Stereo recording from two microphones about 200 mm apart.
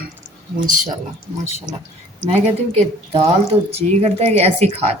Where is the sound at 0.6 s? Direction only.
40° right (ahead or behind).